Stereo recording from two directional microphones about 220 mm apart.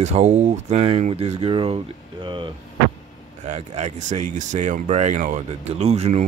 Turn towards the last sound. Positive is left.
turn(degrees=-30)  # may be behind; listen again after turning